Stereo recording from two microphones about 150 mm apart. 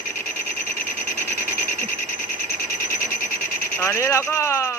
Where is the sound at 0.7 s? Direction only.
15° left (ahead or behind).